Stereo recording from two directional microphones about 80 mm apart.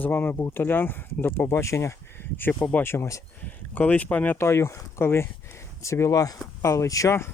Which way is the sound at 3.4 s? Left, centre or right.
Centre.